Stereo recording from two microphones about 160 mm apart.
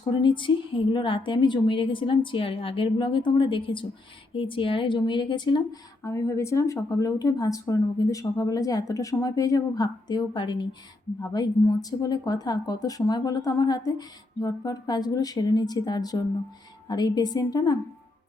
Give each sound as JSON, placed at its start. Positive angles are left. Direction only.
{"t": 0.0, "sound": "a woman's voice", "side_deg": 30}